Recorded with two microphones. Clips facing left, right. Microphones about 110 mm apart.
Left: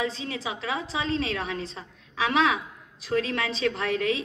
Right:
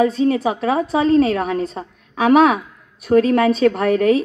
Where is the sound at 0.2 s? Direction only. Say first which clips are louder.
Right 16 dB; 50° right (ahead or behind).